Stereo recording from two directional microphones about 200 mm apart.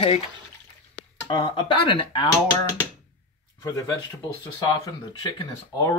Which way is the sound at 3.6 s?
15° left (ahead or behind).